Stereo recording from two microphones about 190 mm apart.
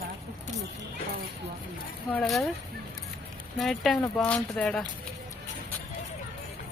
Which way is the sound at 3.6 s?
Centre (ahead or behind).